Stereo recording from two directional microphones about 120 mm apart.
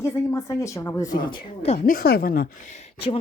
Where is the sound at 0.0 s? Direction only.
25° left (ahead or behind).